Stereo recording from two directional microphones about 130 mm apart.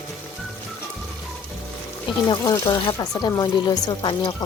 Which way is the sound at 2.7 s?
35° left (ahead or behind).